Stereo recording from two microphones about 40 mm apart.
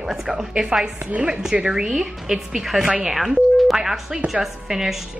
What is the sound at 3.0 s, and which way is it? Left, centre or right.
Telephone, centre.